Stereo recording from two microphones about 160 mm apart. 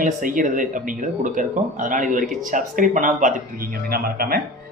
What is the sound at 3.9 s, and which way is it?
Speech, 70° right (ahead or behind).